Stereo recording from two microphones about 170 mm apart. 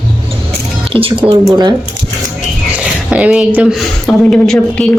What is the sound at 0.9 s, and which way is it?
Speech, 30° right (ahead or behind).